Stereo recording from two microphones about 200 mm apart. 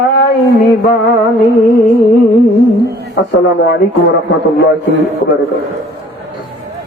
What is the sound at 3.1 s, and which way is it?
Speech, 55° left (ahead or behind).